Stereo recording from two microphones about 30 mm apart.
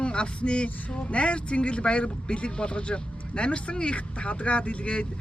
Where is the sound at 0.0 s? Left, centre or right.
Left.